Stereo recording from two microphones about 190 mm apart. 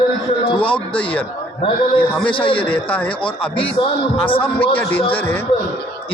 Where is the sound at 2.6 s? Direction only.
10° left (ahead or behind).